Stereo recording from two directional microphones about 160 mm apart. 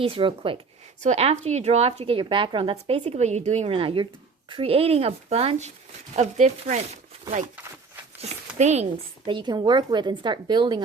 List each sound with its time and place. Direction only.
0.0 s speech: 35° right (ahead or behind)
9.2 s speech: 30° right (ahead or behind)